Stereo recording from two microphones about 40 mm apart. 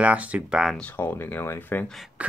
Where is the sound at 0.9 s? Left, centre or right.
Left.